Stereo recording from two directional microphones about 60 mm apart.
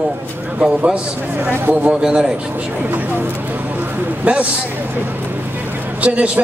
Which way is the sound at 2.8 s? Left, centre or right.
Right.